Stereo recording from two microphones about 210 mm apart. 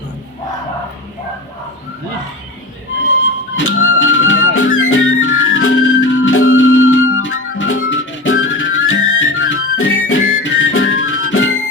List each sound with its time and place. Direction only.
3.5 s music: 65° left (ahead or behind)